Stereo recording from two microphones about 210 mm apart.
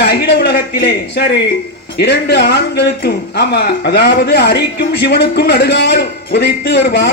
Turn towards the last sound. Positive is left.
turn(degrees=55)  # may be behind; listen again after turning